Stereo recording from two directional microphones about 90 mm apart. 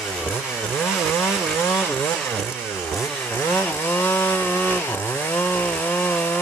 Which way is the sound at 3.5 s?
20° left (ahead or behind).